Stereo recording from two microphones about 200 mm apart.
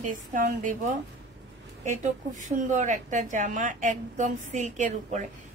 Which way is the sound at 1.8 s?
35° right (ahead or behind).